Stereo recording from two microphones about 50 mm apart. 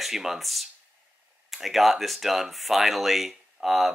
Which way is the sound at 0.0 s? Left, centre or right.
Centre.